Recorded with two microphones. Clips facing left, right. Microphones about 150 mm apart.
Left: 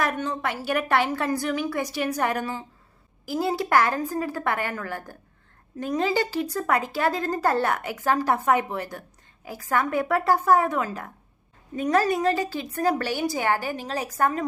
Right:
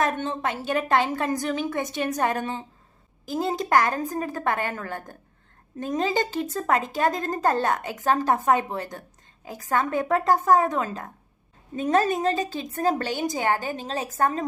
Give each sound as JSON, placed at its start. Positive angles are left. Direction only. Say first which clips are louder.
{"t": 0.0, "sound": "a woman's voice", "louder": "right 1 dB", "side_deg": -25}
{"t": 9.7, "sound": "a woman's voice", "louder": "even", "side_deg": -20}